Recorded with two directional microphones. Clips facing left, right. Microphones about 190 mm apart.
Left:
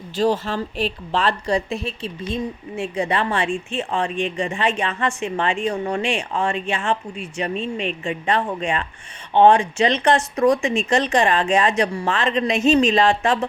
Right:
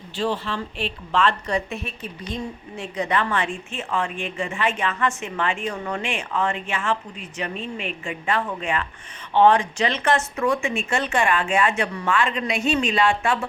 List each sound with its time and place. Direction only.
0.2 s speech: 40° left (ahead or behind); by 9.9 s 20° left (ahead or behind)
10.0 s speech: 35° left (ahead or behind)